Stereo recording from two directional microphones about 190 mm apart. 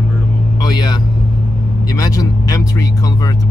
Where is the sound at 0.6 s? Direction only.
20° left (ahead or behind).